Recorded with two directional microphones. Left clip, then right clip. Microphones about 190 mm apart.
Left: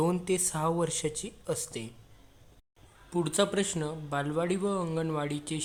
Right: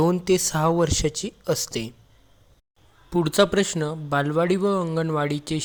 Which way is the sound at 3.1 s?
35° right (ahead or behind).